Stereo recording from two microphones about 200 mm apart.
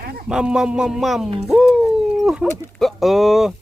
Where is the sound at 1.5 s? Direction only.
Centre (ahead or behind).